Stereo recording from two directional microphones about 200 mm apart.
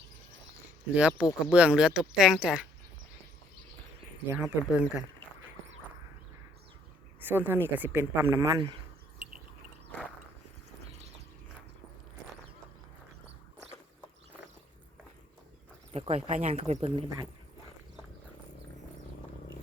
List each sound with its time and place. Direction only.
0.9 s speech: 5° right (ahead or behind)
4.3 s speech: 5° right (ahead or behind)
7.2 s speech: 10° right (ahead or behind)
15.9 s speech: 30° right (ahead or behind)